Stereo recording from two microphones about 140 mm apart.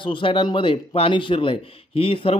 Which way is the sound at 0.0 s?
35° left (ahead or behind).